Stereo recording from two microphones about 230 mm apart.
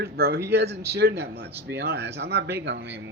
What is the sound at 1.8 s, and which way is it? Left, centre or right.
Speech, right.